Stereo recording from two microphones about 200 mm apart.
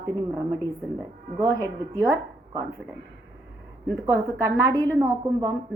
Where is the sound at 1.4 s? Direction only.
15° right (ahead or behind).